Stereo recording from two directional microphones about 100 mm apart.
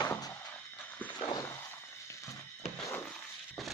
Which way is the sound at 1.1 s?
45° left (ahead or behind).